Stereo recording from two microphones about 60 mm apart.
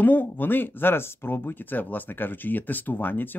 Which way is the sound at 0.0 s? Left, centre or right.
Left.